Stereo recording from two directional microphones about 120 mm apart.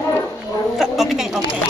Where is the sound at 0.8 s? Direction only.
5° right (ahead or behind).